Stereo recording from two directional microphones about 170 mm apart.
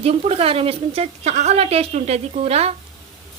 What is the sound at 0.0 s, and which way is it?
A woman's voice, 35° right (ahead or behind).